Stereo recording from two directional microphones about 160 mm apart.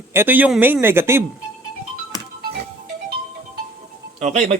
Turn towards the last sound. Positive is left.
turn(degrees=-45)  # may be behind; listen again after turning